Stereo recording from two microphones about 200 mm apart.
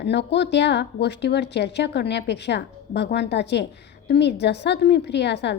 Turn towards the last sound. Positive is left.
turn(degrees=60)  # may be behind; listen again after turning